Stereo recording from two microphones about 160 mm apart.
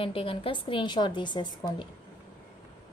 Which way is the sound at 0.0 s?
35° left (ahead or behind).